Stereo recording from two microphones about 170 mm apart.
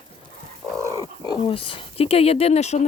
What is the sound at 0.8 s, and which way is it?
Speech, 20° left (ahead or behind).